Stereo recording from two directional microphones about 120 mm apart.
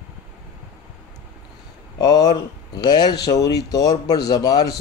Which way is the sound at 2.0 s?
30° left (ahead or behind).